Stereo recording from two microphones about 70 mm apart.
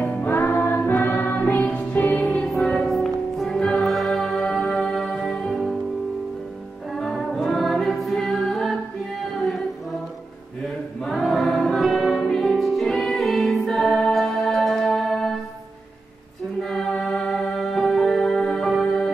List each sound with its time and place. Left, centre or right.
0.0 s music: left; by 5.8 s centre
7.0 s music: centre
10.6 s choir: centre
11.8 s music: centre
16.6 s music: centre